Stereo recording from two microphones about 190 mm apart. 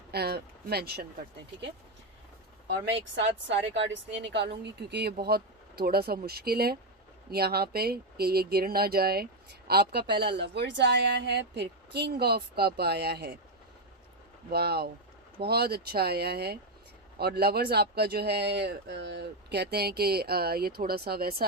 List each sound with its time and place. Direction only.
0.1 s speech: 60° right (ahead or behind)
3.2 s speech: 70° right (ahead or behind)
14.5 s speech: 55° right (ahead or behind)